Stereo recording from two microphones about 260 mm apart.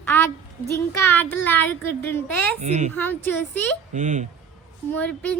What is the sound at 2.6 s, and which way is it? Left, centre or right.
Speech, right.